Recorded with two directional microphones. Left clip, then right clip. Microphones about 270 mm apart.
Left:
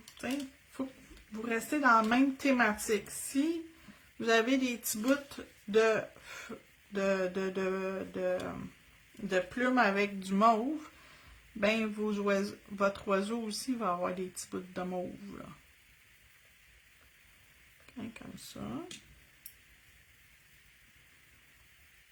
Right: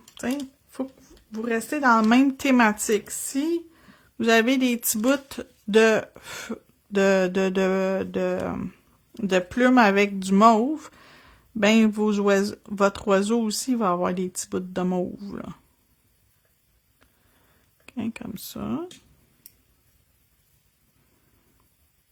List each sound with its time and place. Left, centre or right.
0.2 s a sound: right
1.3 s speech: right
11.6 s speech: right
17.8 s speech: right